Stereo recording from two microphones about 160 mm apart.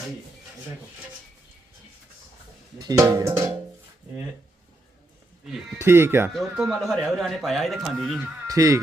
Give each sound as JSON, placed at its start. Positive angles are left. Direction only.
{"t": 2.7, "sound": "speech", "side_deg": -20}
{"t": 5.8, "sound": "speech", "side_deg": -15}
{"t": 6.6, "sound": "speech", "side_deg": 0}
{"t": 8.2, "sound": "speech", "side_deg": -20}